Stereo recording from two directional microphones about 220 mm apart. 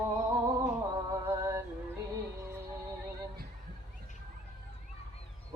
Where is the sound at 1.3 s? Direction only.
15° right (ahead or behind).